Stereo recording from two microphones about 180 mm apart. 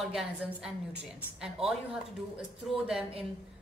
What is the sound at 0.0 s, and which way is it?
A woman's voice, 5° right (ahead or behind).